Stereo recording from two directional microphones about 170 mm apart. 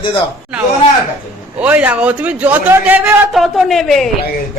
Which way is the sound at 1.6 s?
10° right (ahead or behind).